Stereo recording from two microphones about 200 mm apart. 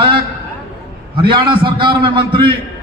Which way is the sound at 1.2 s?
25° right (ahead or behind).